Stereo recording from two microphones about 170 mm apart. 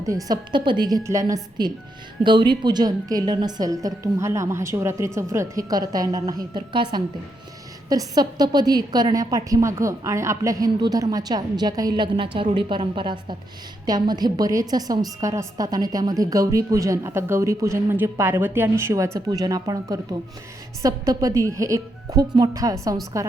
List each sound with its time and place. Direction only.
0.0 s a woman's voice: 20° right (ahead or behind)
7.9 s a woman's voice: 20° right (ahead or behind)